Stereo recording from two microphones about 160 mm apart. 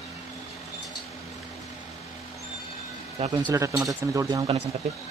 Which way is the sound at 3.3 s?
25° right (ahead or behind).